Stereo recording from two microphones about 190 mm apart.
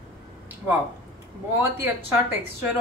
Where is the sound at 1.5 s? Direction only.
10° right (ahead or behind).